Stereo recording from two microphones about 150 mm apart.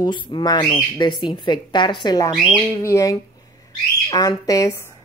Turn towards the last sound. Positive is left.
turn(degrees=25)  # may be behind; listen again after turning